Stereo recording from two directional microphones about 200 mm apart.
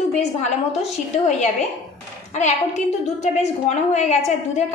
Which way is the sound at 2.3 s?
35° left (ahead or behind).